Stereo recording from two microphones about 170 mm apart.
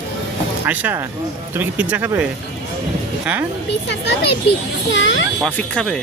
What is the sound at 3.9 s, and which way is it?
Speech, 90° left.